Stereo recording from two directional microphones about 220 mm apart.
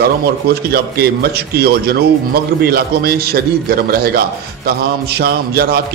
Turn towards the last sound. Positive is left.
turn(degrees=-45)  # may be behind; listen again after turning